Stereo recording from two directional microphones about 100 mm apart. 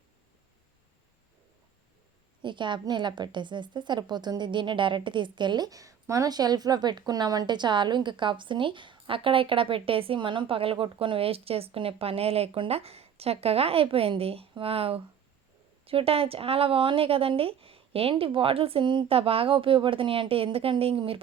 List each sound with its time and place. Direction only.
2.4 s a woman's voice: 50° right (ahead or behind)
19.1 s a woman's voice: 70° right (ahead or behind)